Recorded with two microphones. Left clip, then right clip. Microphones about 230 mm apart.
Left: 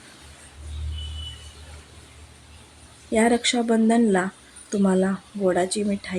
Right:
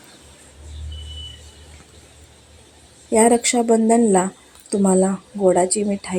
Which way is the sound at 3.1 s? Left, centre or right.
Centre.